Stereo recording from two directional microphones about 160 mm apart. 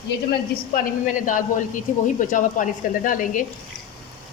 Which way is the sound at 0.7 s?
60° left (ahead or behind).